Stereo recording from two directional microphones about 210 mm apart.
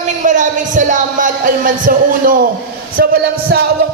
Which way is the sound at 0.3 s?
35° right (ahead or behind).